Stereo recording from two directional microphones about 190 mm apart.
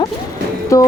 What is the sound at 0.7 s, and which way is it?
Music, 15° left (ahead or behind).